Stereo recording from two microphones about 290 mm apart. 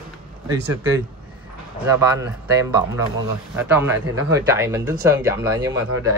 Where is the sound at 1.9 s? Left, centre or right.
Centre.